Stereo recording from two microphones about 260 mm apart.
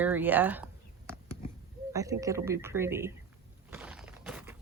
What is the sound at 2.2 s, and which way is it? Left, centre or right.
Speech, centre.